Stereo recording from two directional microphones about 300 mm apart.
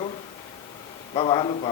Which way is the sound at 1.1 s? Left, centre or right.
Centre.